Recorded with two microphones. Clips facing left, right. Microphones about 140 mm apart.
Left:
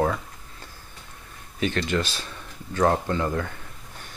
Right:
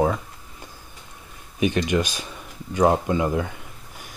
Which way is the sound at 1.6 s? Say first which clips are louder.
Right 4 dB; 15° right (ahead or behind).